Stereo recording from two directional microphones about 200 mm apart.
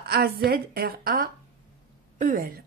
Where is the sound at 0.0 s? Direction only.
50° right (ahead or behind).